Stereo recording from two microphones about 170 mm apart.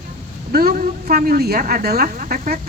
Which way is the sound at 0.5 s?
65° right (ahead or behind).